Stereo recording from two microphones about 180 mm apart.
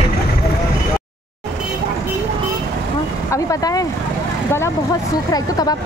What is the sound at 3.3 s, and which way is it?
Vehicle, 20° left (ahead or behind).